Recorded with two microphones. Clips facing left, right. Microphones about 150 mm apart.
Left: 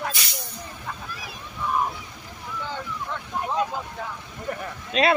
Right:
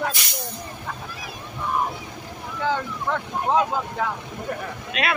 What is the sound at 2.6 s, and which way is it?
Speech, 85° right.